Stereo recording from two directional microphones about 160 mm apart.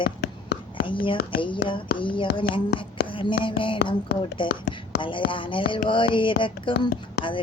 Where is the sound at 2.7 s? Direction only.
90° left.